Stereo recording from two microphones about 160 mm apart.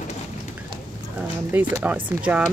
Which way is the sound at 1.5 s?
15° right (ahead or behind).